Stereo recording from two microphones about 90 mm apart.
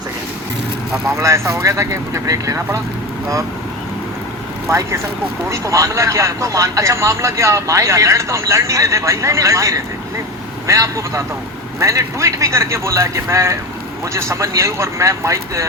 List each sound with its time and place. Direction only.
1.0 s speech: 30° right (ahead or behind)
4.7 s speech: 30° right (ahead or behind)